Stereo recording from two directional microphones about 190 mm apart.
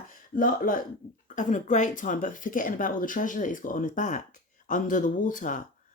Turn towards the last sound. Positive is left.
turn(degrees=45)  # may be behind; listen again after turning